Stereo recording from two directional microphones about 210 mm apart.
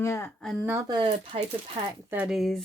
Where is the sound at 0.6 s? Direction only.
15° right (ahead or behind).